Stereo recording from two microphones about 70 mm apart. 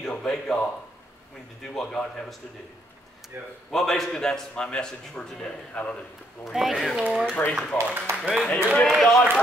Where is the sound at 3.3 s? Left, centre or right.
Right.